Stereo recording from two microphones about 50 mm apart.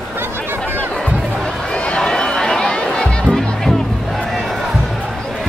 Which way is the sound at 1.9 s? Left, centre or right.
Centre.